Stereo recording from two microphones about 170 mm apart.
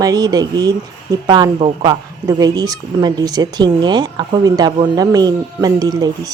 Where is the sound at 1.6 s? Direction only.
35° right (ahead or behind).